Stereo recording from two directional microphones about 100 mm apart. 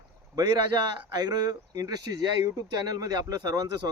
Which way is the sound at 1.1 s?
40° right (ahead or behind).